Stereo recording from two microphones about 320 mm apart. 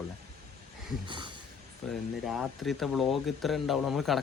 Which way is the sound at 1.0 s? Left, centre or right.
Centre.